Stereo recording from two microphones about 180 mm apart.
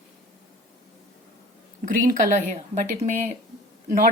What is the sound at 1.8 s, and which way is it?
Speech, 45° right (ahead or behind).